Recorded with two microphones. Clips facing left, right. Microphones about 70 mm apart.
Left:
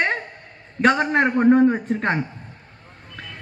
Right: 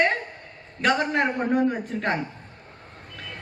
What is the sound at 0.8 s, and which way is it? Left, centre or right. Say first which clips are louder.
A woman's voice: left 4 dB; left.